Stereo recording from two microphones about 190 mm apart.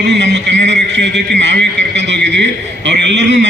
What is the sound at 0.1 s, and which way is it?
A man's voice, 65° right (ahead or behind).